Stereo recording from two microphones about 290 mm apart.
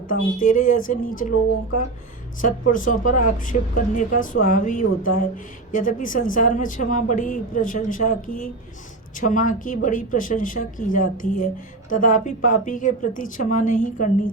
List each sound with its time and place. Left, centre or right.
0.1 s a woman's voice: left
2.4 s a woman's voice: left